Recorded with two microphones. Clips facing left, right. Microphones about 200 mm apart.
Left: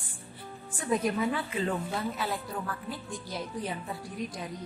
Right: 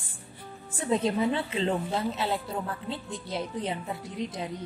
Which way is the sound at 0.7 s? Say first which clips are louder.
Right 2 dB; 25° right (ahead or behind).